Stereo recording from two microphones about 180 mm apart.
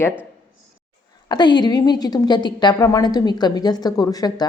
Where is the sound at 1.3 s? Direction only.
25° left (ahead or behind).